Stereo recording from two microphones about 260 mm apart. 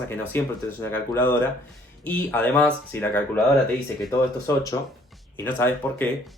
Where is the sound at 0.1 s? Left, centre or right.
Centre.